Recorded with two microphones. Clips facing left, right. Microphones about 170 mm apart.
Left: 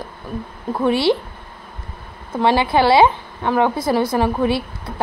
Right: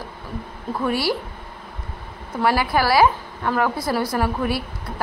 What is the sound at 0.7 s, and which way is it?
Speech, 25° left (ahead or behind).